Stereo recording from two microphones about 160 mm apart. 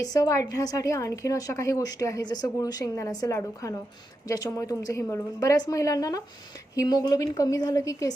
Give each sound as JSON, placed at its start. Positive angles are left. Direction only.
{"t": 0.0, "sound": "a woman's voice", "side_deg": 20}